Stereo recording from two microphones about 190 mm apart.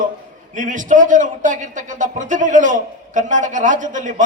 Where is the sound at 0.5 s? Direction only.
45° right (ahead or behind).